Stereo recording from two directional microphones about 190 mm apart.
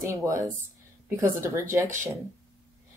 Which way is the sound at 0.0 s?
15° right (ahead or behind).